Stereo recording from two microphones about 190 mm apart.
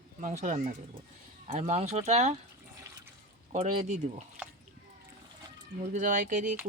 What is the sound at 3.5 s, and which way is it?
Speech, 35° right (ahead or behind).